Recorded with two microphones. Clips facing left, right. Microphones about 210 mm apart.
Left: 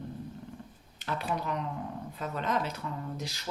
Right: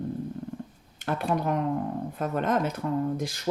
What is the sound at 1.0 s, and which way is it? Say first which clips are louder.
Speech: right 6 dB; 55° right (ahead or behind).